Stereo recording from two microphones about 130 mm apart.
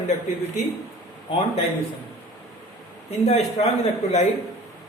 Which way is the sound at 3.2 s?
55° left (ahead or behind).